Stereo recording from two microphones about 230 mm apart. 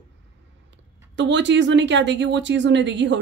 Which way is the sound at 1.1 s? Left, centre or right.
Right.